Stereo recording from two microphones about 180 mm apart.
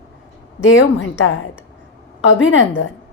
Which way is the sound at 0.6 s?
90° left.